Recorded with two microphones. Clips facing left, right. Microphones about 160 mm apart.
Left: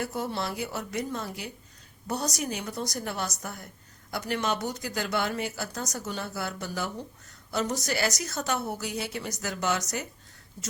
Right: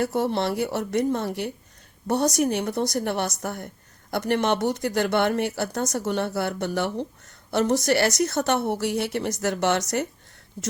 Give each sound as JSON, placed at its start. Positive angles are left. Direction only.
{"t": 0.0, "sound": "speech", "side_deg": -65}